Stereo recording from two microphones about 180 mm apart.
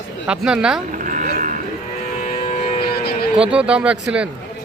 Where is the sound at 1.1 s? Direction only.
45° right (ahead or behind).